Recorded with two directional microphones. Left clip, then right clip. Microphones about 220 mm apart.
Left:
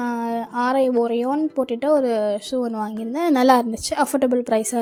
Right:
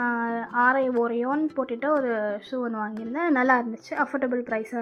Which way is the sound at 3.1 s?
45° left (ahead or behind).